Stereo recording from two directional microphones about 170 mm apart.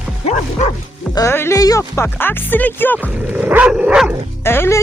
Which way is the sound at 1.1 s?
15° left (ahead or behind).